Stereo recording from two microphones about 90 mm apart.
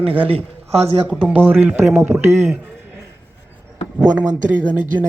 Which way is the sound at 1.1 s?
15° right (ahead or behind).